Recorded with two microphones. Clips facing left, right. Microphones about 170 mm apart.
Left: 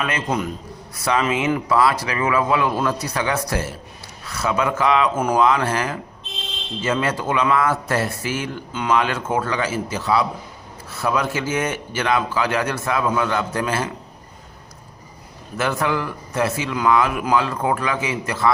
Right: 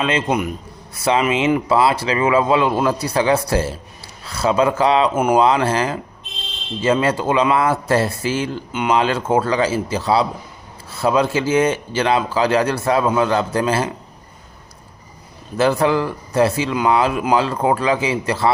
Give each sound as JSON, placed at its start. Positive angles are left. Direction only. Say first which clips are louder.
{"t": 0.0, "sound": "a man's voice", "louder": "right 4 dB", "side_deg": -25}
{"t": 5.1, "sound": "a man's voice", "louder": "right 3 dB", "side_deg": -20}
{"t": 15.5, "sound": "a man's voice", "louder": "right 6 dB", "side_deg": -30}